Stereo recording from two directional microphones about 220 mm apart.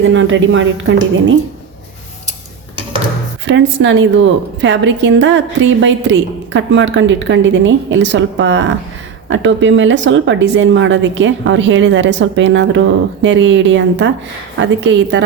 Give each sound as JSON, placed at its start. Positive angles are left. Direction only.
{"t": 0.0, "sound": "a woman's voice", "side_deg": -60}
{"t": 3.4, "sound": "a woman's voice", "side_deg": -55}